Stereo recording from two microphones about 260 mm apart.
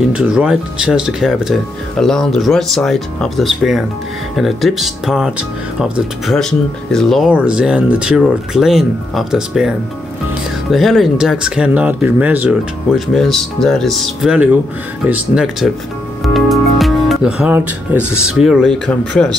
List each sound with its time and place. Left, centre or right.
0.1 s speech: centre
10.7 s speech: centre
16.3 s music: centre
18.3 s speech: centre